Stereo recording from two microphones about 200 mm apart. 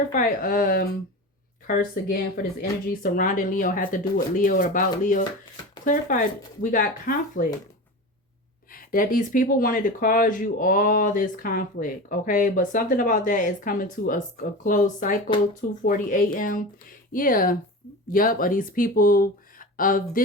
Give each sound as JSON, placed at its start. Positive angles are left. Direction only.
{"t": 0.1, "sound": "speech", "side_deg": 40}
{"t": 8.7, "sound": "speech", "side_deg": 45}